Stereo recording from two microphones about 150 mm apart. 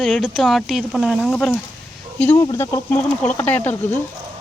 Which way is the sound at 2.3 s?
25° left (ahead or behind).